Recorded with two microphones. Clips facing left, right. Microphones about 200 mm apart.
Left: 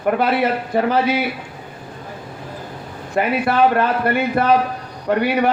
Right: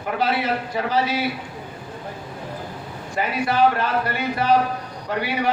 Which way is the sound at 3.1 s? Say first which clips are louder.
Left 4 dB; 55° left (ahead or behind).